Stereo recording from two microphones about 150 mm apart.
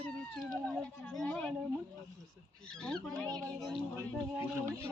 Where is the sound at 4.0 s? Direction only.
15° right (ahead or behind).